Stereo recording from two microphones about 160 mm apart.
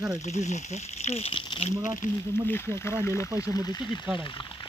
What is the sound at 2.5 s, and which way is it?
Speech, 15° left (ahead or behind).